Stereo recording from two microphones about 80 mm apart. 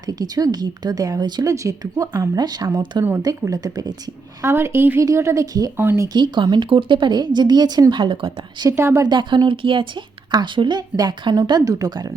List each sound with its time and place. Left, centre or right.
0.0 s speech: right
2.3 s speech: right
3.4 s speech: right
4.4 s speech: right
5.7 s speech: right
6.1 s speech: right
7.9 s a woman's voice: right
8.7 s speech: right
9.0 s a woman's voice: right
11.6 s speech: right